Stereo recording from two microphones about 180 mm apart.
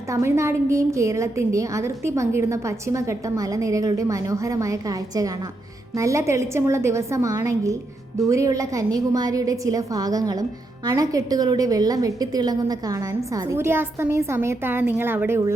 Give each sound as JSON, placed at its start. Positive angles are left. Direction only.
{"t": 0.1, "sound": "a woman's voice", "side_deg": -15}